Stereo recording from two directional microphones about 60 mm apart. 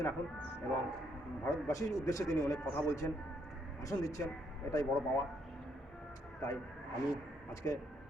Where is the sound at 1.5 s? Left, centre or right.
Left.